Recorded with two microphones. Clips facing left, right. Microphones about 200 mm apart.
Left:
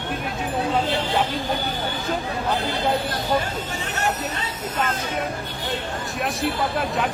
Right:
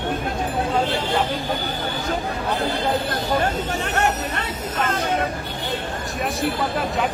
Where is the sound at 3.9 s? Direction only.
60° right (ahead or behind).